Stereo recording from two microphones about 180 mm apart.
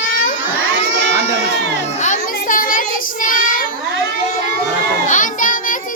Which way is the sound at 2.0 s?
45° left (ahead or behind).